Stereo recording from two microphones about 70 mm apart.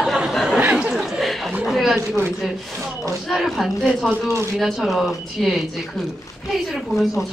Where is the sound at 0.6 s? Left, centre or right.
Centre.